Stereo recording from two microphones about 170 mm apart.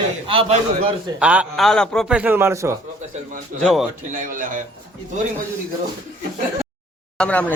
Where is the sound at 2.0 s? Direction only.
5° right (ahead or behind).